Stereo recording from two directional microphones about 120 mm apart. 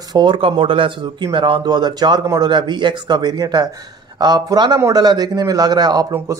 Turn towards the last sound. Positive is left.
turn(degrees=-35)  # may be behind; listen again after turning